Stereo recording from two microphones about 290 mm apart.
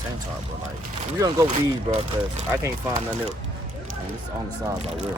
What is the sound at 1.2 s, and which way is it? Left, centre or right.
Speech, centre.